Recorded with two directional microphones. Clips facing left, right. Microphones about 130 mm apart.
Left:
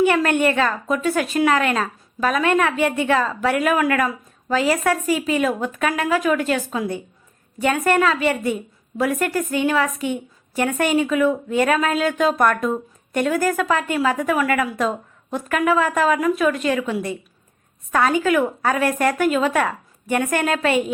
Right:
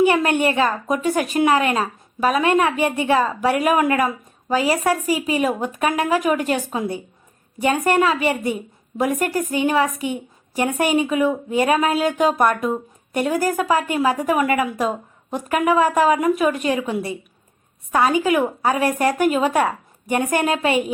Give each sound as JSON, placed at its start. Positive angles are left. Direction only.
{"t": 0.0, "sound": "a woman's voice", "side_deg": -15}